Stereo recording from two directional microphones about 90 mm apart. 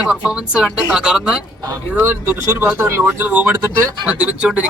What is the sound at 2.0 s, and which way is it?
Speech, 25° right (ahead or behind).